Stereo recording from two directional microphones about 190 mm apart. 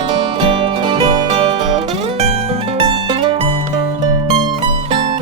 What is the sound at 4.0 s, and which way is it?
Music, 20° right (ahead or behind).